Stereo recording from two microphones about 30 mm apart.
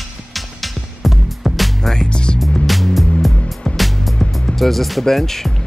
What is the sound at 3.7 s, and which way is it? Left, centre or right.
Music, left.